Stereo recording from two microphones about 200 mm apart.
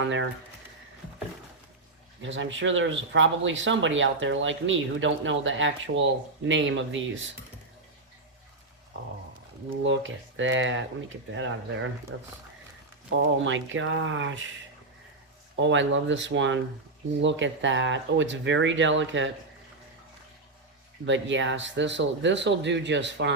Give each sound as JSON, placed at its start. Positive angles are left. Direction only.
{"t": 0.0, "sound": "speech", "side_deg": -70}
{"t": 2.2, "sound": "speech", "side_deg": -70}
{"t": 9.8, "sound": "speech", "side_deg": -70}
{"t": 15.5, "sound": "speech", "side_deg": -65}
{"t": 21.0, "sound": "speech", "side_deg": -65}